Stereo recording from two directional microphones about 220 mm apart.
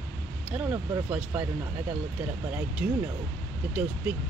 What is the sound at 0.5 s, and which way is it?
Speech, 10° right (ahead or behind).